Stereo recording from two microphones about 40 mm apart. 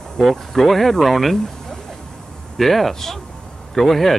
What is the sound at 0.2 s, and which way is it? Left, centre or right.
Speech, centre.